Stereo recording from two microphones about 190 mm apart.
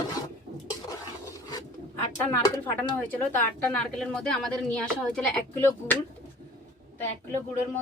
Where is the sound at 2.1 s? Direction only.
15° left (ahead or behind).